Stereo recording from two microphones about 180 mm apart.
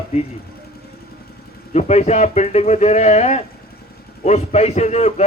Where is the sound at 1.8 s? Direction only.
40° left (ahead or behind).